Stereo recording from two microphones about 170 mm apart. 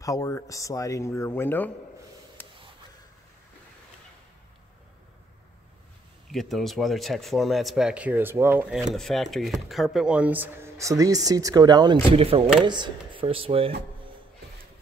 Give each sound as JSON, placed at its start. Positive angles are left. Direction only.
{"t": 0.0, "sound": "speech", "side_deg": 20}
{"t": 6.3, "sound": "speech", "side_deg": 0}
{"t": 8.9, "sound": "speech", "side_deg": 0}